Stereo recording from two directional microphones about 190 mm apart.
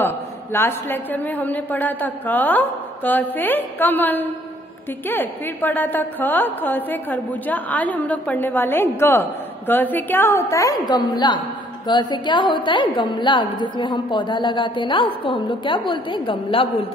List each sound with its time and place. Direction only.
0.0 s a man's voice: 10° left (ahead or behind); by 16.6 s 25° left (ahead or behind)